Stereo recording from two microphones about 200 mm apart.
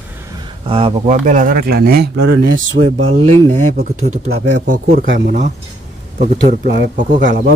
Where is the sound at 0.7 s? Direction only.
25° right (ahead or behind).